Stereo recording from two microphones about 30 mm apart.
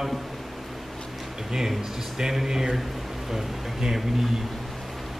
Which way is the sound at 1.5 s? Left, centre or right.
Centre.